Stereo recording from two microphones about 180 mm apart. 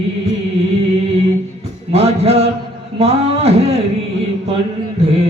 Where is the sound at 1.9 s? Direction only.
35° right (ahead or behind).